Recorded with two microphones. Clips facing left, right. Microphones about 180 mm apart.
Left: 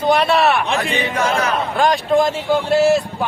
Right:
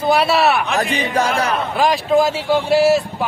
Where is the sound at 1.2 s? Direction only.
35° right (ahead or behind).